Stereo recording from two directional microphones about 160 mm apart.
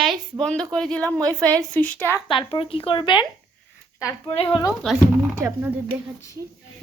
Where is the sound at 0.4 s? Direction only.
5° left (ahead or behind).